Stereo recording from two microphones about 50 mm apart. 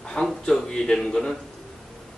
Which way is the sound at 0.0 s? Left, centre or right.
Centre.